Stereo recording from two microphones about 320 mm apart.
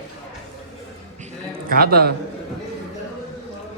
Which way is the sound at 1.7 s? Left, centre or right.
Right.